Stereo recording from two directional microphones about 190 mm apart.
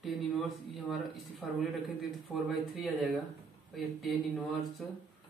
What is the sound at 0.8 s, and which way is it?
Speech, centre (ahead or behind).